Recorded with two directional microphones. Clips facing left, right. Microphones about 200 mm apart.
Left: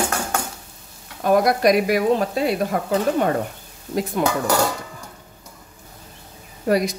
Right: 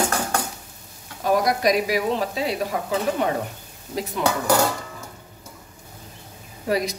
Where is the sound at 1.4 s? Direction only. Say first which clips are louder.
Left 4 dB; 55° left (ahead or behind).